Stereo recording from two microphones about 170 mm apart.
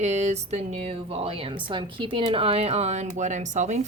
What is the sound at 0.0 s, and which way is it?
Speech, 40° right (ahead or behind).